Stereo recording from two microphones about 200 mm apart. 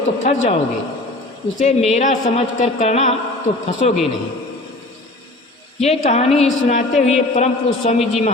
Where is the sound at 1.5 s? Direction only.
35° left (ahead or behind).